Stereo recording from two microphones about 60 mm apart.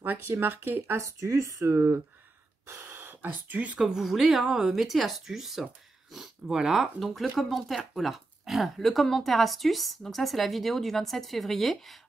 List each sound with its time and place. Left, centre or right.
0.0 s speech: right
0.9 s speech: right
1.7 s speech: right
3.8 s speech: centre